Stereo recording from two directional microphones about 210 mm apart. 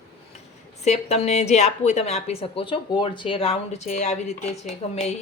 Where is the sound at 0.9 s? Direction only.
30° left (ahead or behind).